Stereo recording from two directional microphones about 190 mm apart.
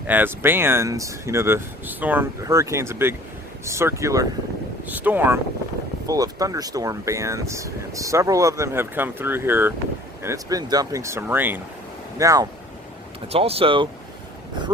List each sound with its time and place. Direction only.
0.1 s speech: 10° right (ahead or behind)
13.2 s speech: 30° right (ahead or behind)